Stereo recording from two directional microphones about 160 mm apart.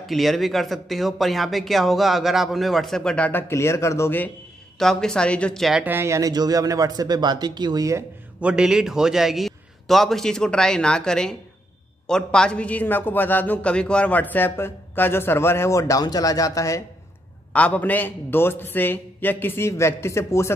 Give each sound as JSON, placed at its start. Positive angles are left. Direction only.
{"t": 0.0, "sound": "speech", "side_deg": 0}
{"t": 4.7, "sound": "speech", "side_deg": 5}
{"t": 8.4, "sound": "a man's voice", "side_deg": -5}
{"t": 17.5, "sound": "a man's voice", "side_deg": 10}